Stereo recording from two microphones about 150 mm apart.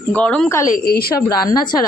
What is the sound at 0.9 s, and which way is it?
Speech, 90° left.